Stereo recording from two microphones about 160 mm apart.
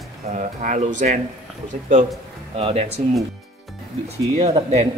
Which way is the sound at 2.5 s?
40° right (ahead or behind).